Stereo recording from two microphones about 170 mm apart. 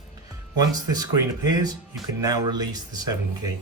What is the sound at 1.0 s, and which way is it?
Speech, 20° right (ahead or behind).